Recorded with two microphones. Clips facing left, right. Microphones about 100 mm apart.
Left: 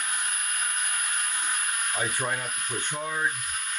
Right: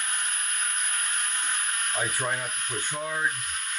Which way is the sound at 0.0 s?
10° left (ahead or behind).